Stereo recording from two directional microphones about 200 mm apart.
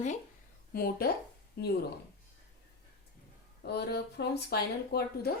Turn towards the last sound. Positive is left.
turn(degrees=50)  # may be behind; listen again after turning